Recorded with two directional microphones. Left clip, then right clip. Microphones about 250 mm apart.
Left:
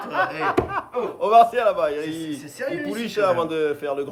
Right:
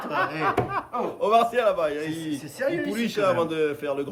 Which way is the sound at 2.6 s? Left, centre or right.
Centre.